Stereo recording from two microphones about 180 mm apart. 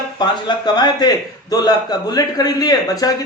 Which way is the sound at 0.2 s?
25° left (ahead or behind).